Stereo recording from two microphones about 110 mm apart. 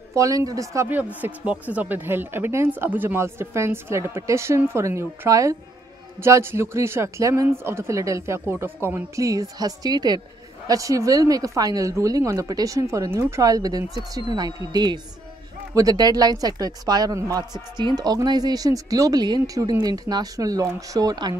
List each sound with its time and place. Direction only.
0.1 s a woman's voice: 30° right (ahead or behind)
0.8 s a woman's voice: 15° right (ahead or behind); by 21.4 s 40° right (ahead or behind)